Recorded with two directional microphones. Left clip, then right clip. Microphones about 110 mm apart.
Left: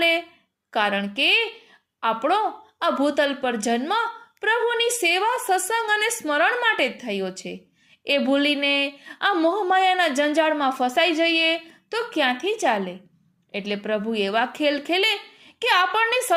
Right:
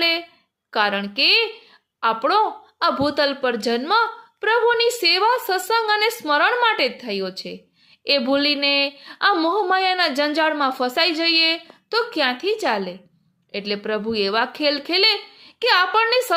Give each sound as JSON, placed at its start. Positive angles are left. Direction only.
{"t": 0.7, "sound": "a woman's voice", "side_deg": -30}